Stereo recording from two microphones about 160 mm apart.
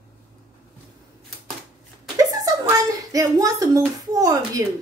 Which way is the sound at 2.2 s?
20° right (ahead or behind).